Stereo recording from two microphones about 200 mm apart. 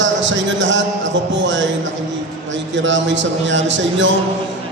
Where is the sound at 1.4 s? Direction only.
65° right (ahead or behind).